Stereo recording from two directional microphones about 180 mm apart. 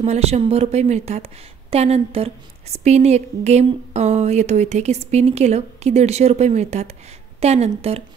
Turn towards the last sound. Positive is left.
turn(degrees=-35)  # may be behind; listen again after turning